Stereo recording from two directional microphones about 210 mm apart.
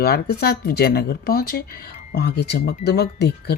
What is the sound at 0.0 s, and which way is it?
Speech, 50° left (ahead or behind).